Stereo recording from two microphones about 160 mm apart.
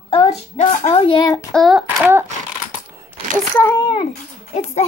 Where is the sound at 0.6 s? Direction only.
45° left (ahead or behind).